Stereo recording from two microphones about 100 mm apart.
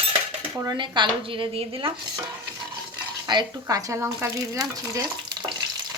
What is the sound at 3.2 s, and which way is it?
Frying, 40° right (ahead or behind).